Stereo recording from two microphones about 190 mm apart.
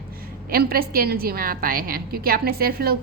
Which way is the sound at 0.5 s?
50° right (ahead or behind).